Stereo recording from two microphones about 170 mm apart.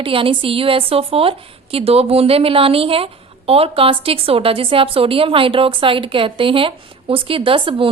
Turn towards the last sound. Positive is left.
turn(degrees=-30)  # may be behind; listen again after turning